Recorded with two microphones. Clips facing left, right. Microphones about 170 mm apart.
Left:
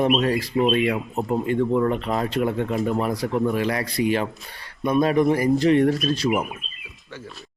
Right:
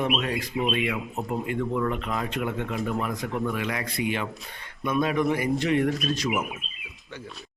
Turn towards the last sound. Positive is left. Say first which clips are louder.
# left 2 dB
turn(degrees=0)  # may be behind; listen again after turning